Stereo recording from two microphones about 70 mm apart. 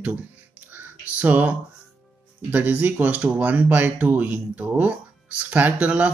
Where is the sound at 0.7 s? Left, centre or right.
Right.